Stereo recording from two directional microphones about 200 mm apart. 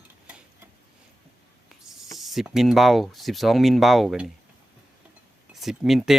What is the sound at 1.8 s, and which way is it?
Speech, centre (ahead or behind).